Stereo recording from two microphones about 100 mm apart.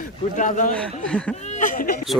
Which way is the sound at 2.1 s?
Centre (ahead or behind).